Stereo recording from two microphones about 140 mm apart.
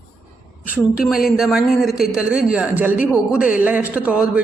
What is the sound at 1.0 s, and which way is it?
A man's voice, 5° right (ahead or behind).